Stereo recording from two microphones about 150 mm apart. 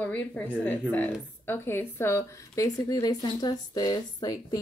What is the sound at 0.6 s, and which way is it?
A woman's voice, 10° left (ahead or behind).